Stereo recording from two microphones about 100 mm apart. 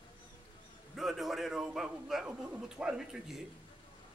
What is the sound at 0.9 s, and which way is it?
A man's voice, centre (ahead or behind).